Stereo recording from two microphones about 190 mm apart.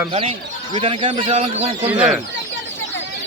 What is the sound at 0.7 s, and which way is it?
Speech, 30° right (ahead or behind).